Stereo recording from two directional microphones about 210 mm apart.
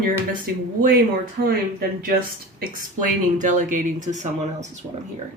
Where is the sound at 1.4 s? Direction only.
50° right (ahead or behind).